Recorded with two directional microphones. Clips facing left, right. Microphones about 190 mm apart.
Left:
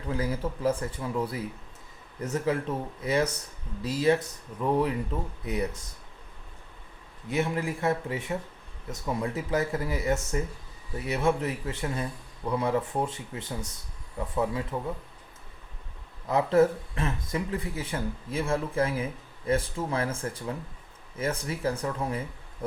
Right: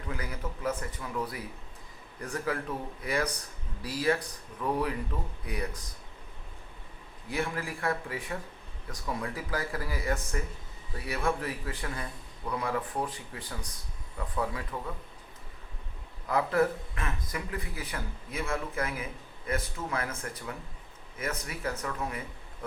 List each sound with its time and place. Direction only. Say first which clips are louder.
0.1 s a man's voice: left 8 dB; 30° left (ahead or behind)
7.3 s a man's voice: left 5 dB; 20° left (ahead or behind)
16.2 s a man's voice: left 5 dB; 25° left (ahead or behind)